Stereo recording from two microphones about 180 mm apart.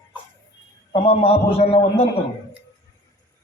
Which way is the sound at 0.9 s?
35° left (ahead or behind).